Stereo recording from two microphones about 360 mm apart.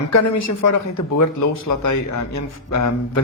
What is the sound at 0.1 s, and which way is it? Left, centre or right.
Speech, left.